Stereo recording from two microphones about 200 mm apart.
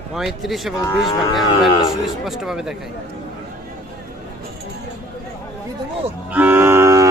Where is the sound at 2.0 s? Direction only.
Centre (ahead or behind).